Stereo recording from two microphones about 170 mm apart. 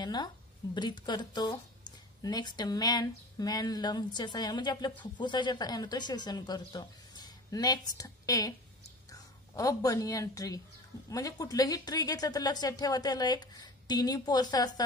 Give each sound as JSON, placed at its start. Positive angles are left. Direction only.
{"t": 0.0, "sound": "a woman's voice", "side_deg": 25}